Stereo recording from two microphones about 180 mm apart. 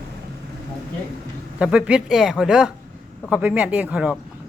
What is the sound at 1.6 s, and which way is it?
A woman's voice, 5° right (ahead or behind).